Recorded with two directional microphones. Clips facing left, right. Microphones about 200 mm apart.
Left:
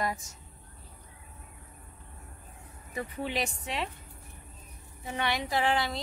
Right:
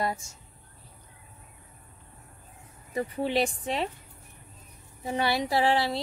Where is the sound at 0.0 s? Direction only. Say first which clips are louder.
Right 2 dB; 30° right (ahead or behind).